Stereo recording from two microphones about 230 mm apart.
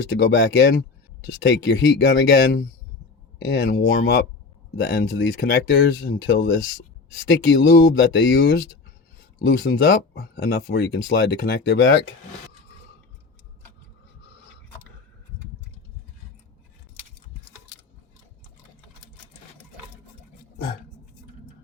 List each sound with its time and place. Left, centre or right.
0.2 s speech: left
10.2 s speech: left